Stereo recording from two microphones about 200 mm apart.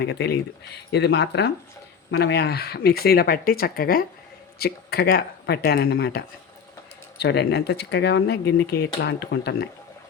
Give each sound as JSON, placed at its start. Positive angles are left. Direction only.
{"t": 0.0, "sound": "speech", "side_deg": 55}